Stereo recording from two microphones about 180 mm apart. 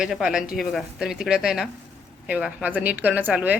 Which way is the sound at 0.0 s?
5° right (ahead or behind).